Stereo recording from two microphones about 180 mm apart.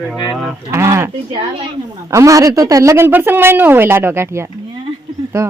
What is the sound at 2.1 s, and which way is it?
Speech, 15° right (ahead or behind).